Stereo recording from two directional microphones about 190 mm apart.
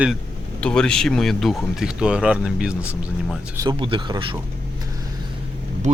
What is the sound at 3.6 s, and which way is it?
Speech, 25° right (ahead or behind).